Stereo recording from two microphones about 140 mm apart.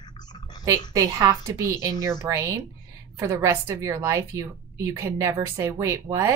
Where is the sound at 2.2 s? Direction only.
20° right (ahead or behind).